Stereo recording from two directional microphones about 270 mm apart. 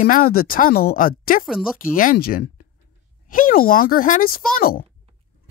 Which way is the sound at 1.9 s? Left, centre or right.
Left.